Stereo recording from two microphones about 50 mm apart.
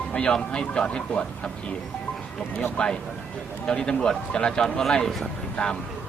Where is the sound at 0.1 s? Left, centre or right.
Left.